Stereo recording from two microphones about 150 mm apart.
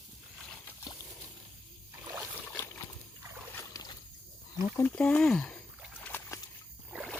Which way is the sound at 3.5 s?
25° left (ahead or behind).